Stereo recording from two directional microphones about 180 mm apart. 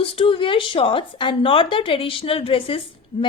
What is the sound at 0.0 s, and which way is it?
A woman's voice, 30° left (ahead or behind).